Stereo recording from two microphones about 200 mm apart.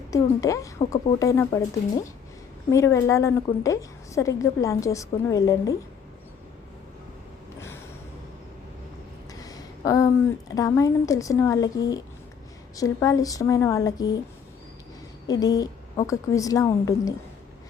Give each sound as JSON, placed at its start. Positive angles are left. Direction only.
{"t": 0.1, "sound": "a woman's voice", "side_deg": 15}
{"t": 2.6, "sound": "a woman's voice", "side_deg": 15}
{"t": 9.3, "sound": "a sound", "side_deg": 20}
{"t": 10.5, "sound": "a woman's voice", "side_deg": 15}
{"t": 15.3, "sound": "a woman's voice", "side_deg": 20}